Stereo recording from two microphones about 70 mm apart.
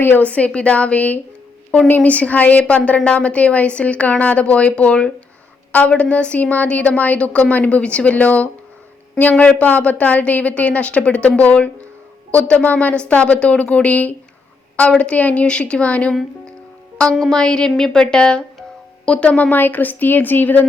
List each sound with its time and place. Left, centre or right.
0.2 s a woman's voice: centre
17.2 s a woman's voice: centre; by 20.7 s left